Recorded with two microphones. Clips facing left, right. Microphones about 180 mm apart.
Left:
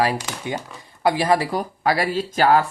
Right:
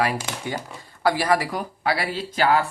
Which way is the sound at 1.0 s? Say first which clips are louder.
Left 2 dB; 20° left (ahead or behind).